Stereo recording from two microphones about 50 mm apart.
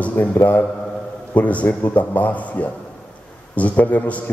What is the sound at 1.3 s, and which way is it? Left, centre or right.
A man's voice, left.